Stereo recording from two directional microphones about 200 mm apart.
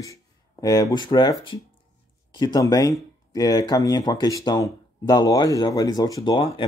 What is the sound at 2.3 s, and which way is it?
Speech, 20° left (ahead or behind).